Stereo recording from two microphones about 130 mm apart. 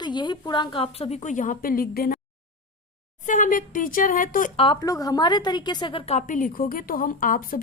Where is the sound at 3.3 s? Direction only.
85° left.